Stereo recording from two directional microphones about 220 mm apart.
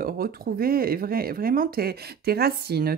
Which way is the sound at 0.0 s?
40° right (ahead or behind).